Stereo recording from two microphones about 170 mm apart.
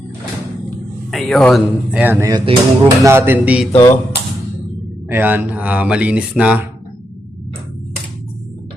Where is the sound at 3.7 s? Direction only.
15° left (ahead or behind).